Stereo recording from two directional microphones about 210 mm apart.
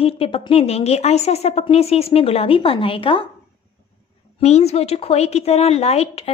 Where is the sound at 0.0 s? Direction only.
25° left (ahead or behind).